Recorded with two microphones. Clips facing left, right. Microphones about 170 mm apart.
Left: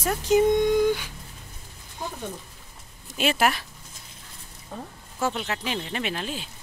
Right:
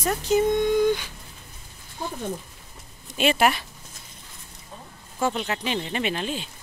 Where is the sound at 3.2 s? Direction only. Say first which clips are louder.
Right 2 dB; centre (ahead or behind).